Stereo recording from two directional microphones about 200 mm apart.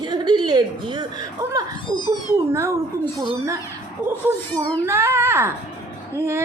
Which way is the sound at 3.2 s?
15° right (ahead or behind).